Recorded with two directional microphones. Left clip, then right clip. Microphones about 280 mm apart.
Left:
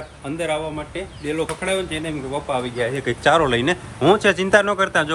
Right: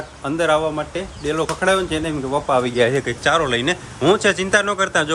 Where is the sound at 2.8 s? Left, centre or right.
Right.